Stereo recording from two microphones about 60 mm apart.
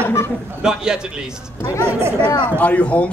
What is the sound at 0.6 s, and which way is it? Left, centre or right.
Speech, centre.